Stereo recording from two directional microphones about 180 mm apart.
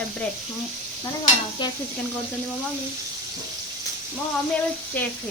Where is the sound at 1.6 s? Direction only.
25° left (ahead or behind).